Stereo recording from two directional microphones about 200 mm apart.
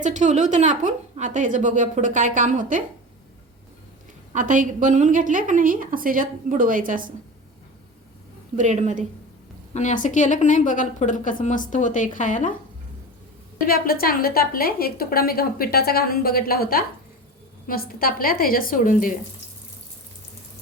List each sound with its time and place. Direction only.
0.0 s a woman's voice: 35° right (ahead or behind)
4.3 s a woman's voice: 40° right (ahead or behind)
8.5 s a woman's voice: 35° right (ahead or behind)
9.7 s a woman's voice: 40° left (ahead or behind)
13.7 s a woman's voice: 50° left (ahead or behind)